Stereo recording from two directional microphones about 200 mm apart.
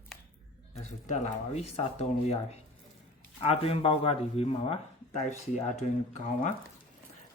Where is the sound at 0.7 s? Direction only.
35° left (ahead or behind).